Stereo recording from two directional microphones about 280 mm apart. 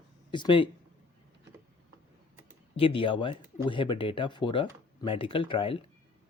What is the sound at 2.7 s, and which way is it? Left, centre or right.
Speech, centre.